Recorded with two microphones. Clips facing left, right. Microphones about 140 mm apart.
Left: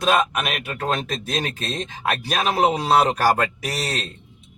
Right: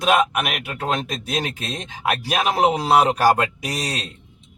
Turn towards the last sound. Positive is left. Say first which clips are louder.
# even
turn(degrees=-15)  # may be behind; listen again after turning